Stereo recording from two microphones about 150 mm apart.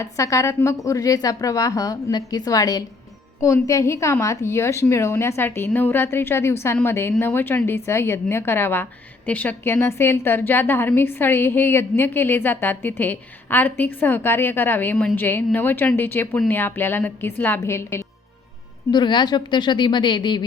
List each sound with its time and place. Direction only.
0.0 s a woman's voice: 20° left (ahead or behind)
18.9 s a woman's voice: 30° left (ahead or behind)